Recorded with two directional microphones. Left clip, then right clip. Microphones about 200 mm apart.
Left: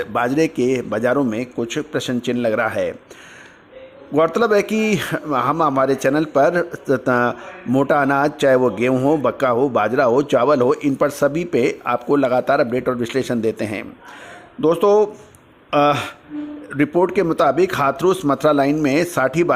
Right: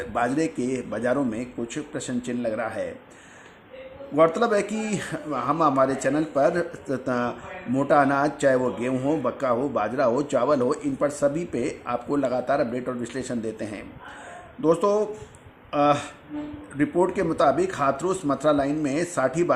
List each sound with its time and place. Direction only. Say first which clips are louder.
0.0 s a man's voice: left 6 dB; 40° left (ahead or behind)
4.1 s a man's voice: left 4 dB; 40° left (ahead or behind)